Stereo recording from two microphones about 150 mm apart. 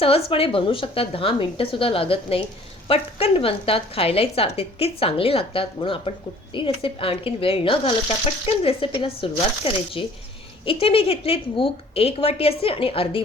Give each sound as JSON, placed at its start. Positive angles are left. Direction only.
{"t": 0.3, "sound": "a woman's voice", "side_deg": 35}